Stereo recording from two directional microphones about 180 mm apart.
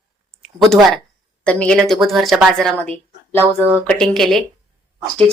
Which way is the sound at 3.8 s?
5° left (ahead or behind).